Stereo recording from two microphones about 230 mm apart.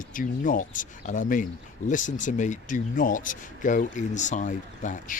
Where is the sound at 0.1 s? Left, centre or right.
Left.